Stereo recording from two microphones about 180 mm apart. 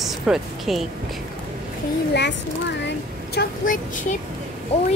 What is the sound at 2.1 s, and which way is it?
Speech, 75° left (ahead or behind).